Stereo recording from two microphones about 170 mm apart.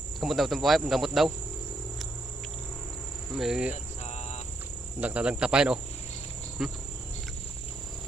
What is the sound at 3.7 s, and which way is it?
Cricket, 40° left (ahead or behind).